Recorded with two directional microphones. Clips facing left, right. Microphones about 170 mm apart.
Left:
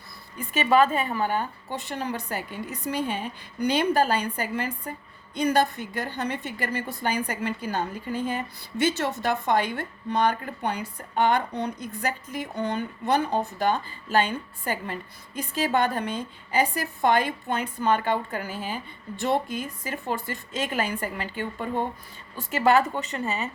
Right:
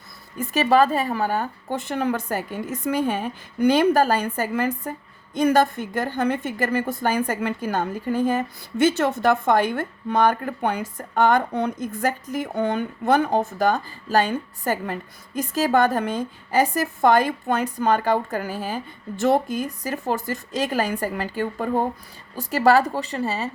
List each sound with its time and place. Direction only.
0.3 s a woman's voice: 40° right (ahead or behind)